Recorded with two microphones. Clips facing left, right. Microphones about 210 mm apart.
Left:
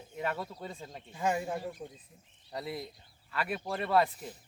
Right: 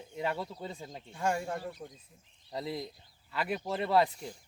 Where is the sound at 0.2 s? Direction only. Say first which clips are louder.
Right 1 dB; 15° right (ahead or behind).